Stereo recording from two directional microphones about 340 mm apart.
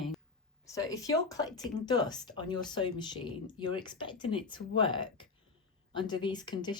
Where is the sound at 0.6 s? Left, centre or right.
Centre.